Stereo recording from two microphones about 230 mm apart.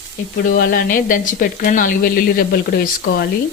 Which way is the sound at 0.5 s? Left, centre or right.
Left.